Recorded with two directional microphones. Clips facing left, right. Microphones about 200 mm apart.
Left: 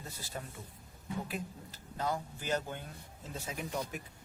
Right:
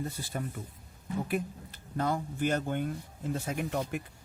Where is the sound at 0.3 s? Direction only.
60° right (ahead or behind).